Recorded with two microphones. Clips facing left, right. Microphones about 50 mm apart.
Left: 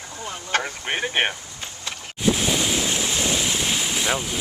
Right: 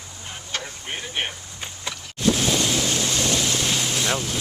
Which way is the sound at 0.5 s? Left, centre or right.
Left.